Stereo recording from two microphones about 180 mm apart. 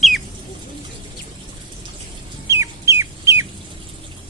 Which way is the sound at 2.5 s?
15° right (ahead or behind).